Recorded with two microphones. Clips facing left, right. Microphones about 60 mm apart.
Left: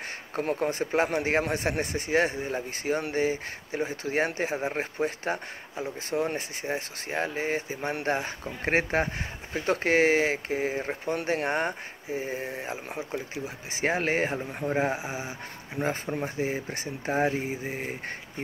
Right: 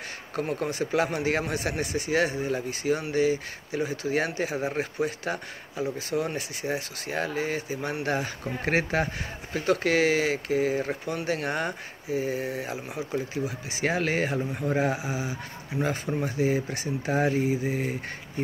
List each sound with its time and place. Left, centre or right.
0.4 s speech: left